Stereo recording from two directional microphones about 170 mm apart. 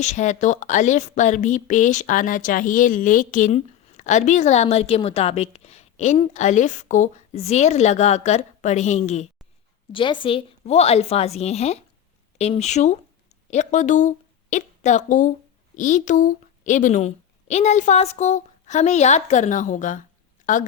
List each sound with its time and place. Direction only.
0.0 s speech: 45° left (ahead or behind)
9.9 s a woman's voice: 30° left (ahead or behind); by 20.7 s 50° left (ahead or behind)